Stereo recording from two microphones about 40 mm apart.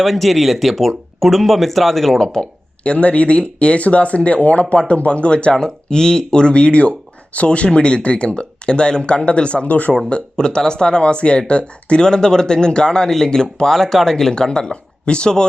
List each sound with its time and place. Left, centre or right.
0.0 s speech: centre
2.2 s speech: centre
2.8 s speech: left
10.1 s speech: left